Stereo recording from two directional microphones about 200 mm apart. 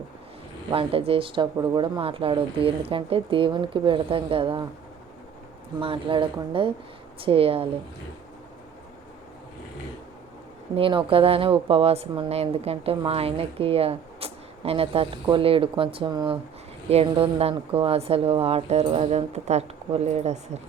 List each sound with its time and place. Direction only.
0.7 s speech: 30° right (ahead or behind)
5.8 s speech: 25° right (ahead or behind)
10.8 s speech: 25° right (ahead or behind)